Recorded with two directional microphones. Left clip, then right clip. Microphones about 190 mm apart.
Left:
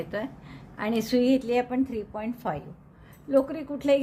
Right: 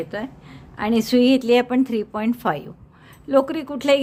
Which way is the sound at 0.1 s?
15° right (ahead or behind).